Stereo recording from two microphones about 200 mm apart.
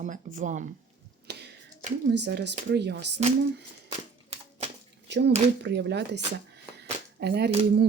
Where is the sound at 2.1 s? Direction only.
60° right (ahead or behind).